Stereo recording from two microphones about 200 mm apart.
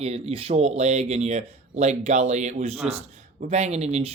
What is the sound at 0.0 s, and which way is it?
Speech, 30° right (ahead or behind).